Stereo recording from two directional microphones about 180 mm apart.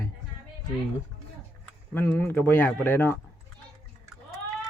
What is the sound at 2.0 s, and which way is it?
A man's voice, 10° left (ahead or behind).